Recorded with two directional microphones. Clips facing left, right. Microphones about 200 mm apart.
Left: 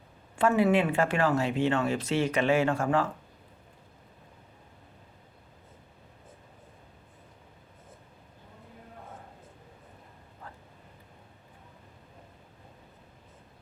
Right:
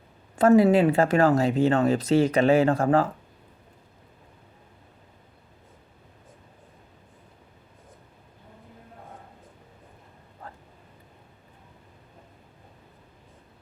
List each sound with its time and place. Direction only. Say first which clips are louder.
0.3 s speech: right 6 dB; 40° right (ahead or behind)
10.4 s vehicle: right 4 dB; 40° right (ahead or behind)